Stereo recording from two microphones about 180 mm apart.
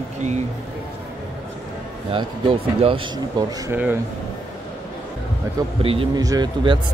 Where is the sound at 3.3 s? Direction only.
20° right (ahead or behind).